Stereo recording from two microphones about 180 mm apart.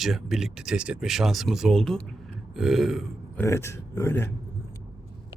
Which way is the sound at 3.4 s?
15° left (ahead or behind).